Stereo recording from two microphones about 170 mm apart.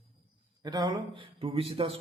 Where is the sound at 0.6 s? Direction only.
25° right (ahead or behind).